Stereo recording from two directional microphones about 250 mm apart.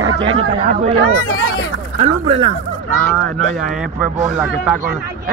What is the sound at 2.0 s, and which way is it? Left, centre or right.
Speech, right.